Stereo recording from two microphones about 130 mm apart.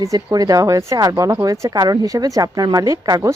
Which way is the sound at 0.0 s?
25° right (ahead or behind).